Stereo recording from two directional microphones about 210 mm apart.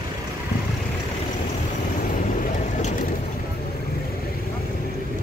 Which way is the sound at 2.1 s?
35° left (ahead or behind).